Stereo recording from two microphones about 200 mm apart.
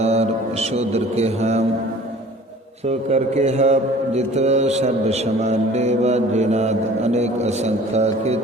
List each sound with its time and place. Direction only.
0.0 s speech: 30° right (ahead or behind)
3.1 s mantra: 35° right (ahead or behind)